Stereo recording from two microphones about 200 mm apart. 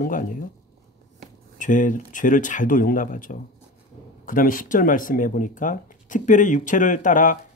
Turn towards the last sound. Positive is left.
turn(degrees=40)  # may be behind; listen again after turning